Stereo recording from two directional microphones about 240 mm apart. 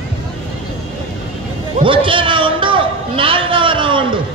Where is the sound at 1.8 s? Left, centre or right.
Right.